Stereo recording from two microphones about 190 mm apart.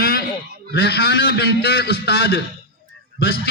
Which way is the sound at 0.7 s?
60° left (ahead or behind).